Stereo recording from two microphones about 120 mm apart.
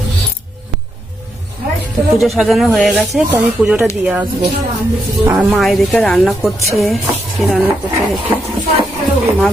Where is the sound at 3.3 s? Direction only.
20° right (ahead or behind).